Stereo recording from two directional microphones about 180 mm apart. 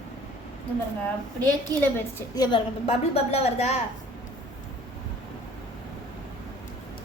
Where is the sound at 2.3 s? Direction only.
25° left (ahead or behind).